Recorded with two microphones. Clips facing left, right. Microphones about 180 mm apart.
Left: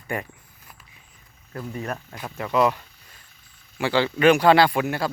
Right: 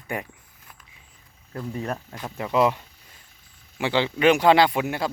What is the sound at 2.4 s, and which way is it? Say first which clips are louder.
Speech: even; 25° right (ahead or behind).